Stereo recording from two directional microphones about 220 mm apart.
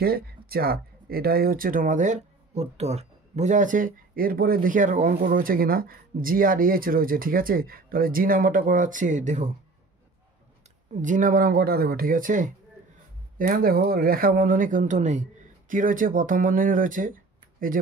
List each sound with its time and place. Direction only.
0.0 s speech: 45° right (ahead or behind)
10.9 s speech: 35° right (ahead or behind)